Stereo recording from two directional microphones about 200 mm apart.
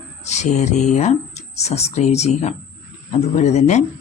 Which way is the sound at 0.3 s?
35° left (ahead or behind).